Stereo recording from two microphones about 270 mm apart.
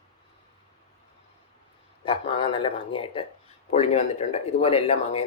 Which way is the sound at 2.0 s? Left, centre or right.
Centre.